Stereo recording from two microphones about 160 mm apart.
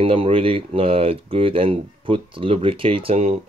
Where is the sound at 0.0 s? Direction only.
35° right (ahead or behind).